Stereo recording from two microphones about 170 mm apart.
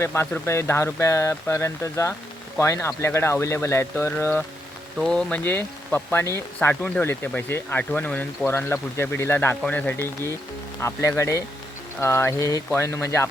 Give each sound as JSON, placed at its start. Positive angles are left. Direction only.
{"t": 0.0, "sound": "speech", "side_deg": 15}